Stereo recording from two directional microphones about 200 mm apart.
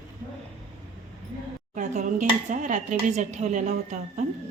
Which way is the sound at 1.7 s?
40° right (ahead or behind).